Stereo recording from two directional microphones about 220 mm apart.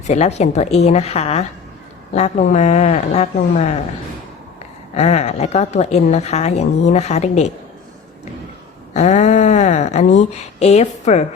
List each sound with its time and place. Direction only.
0.1 s a woman's voice: 30° left (ahead or behind)
4.9 s a woman's voice: 30° left (ahead or behind)
8.9 s a woman's voice: 30° left (ahead or behind)